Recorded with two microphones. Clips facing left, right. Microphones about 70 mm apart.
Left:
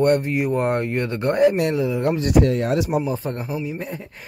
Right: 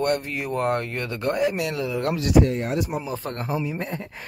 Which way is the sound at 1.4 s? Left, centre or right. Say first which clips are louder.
Left 9 dB; left.